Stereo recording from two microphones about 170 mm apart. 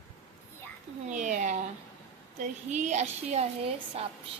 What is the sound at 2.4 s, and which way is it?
A woman's voice, 45° right (ahead or behind).